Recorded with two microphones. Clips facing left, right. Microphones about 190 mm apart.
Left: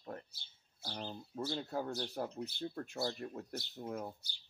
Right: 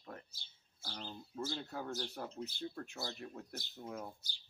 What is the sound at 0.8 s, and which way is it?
Speech, 55° left (ahead or behind).